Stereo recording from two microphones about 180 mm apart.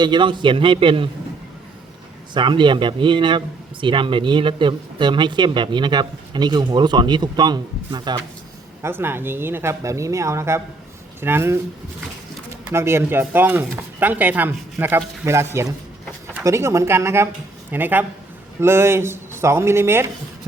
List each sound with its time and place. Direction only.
0.0 s speech: 25° right (ahead or behind)
2.3 s speech: 25° right (ahead or behind)
8.8 s speech: 15° right (ahead or behind)
12.7 s speech: 15° right (ahead or behind)